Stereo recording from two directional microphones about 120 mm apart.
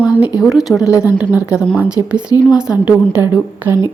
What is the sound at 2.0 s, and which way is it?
Speech, 25° right (ahead or behind).